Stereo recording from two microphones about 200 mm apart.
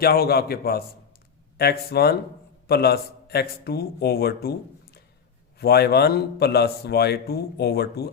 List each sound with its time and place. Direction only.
0.0 s a man's voice: 50° left (ahead or behind)
5.5 s a man's voice: 55° left (ahead or behind)